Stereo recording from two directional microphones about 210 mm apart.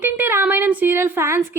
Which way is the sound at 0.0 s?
10° right (ahead or behind).